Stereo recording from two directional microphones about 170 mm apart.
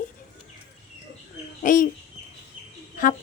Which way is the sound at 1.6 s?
50° left (ahead or behind).